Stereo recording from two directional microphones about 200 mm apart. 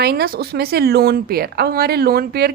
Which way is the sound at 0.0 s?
50° right (ahead or behind).